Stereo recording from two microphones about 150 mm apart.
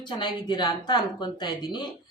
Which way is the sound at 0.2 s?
30° left (ahead or behind).